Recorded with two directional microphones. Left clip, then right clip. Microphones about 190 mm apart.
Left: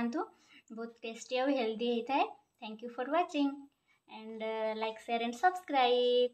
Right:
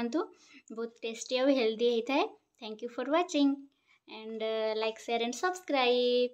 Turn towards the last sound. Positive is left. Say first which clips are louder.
# right 1 dB
turn(degrees=-40)  # may be behind; listen again after turning